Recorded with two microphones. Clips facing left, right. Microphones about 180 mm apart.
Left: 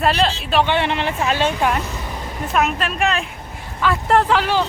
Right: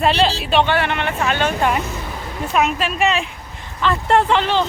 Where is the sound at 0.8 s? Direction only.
30° left (ahead or behind).